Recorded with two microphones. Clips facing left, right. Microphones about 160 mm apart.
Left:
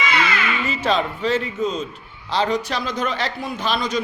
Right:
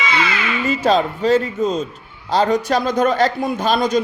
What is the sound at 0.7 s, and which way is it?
A man's voice, 40° right (ahead or behind).